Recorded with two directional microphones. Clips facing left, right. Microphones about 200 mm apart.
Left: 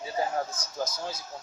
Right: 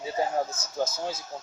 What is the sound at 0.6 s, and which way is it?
Speech, 25° right (ahead or behind).